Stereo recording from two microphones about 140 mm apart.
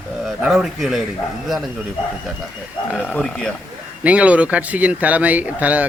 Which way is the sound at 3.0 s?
5° left (ahead or behind).